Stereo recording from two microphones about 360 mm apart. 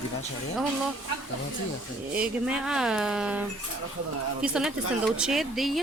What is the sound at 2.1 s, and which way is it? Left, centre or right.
Speech, centre.